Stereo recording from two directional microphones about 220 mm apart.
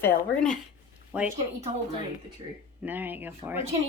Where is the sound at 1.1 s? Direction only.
5° right (ahead or behind).